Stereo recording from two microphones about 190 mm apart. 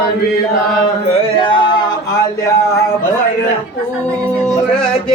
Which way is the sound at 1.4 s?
25° left (ahead or behind).